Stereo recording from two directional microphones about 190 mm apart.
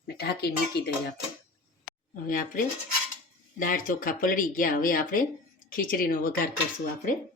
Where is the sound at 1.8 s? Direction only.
45° left (ahead or behind).